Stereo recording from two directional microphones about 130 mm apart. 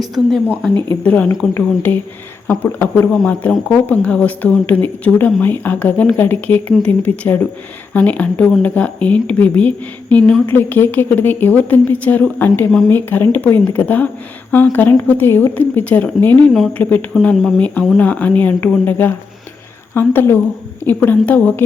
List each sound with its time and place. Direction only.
0.0 s speech: centre (ahead or behind)
0.6 s speech: 10° left (ahead or behind)